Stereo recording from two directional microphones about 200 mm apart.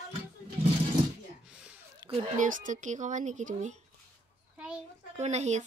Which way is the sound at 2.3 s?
40° right (ahead or behind).